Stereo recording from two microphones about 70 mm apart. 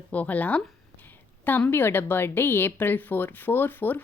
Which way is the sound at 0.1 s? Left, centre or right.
Left.